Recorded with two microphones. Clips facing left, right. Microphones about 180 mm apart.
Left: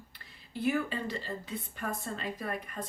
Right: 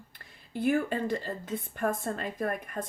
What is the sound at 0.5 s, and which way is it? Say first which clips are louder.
Speech: right 4 dB; 50° right (ahead or behind).